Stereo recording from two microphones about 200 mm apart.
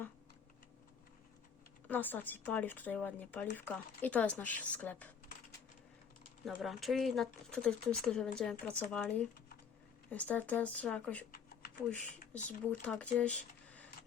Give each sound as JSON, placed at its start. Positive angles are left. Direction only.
{"t": 1.9, "sound": "speech", "side_deg": 10}
{"t": 6.4, "sound": "speech", "side_deg": 0}
{"t": 12.3, "sound": "speech", "side_deg": 5}